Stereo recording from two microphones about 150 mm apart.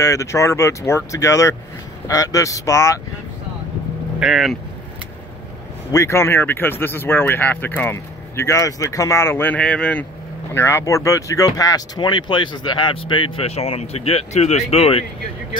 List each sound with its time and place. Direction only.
0.0 s speech: 20° left (ahead or behind)
4.2 s speech: centre (ahead or behind)
5.9 s speech: 20° left (ahead or behind)
10.5 s speech: 15° left (ahead or behind); by 15.0 s 40° left (ahead or behind)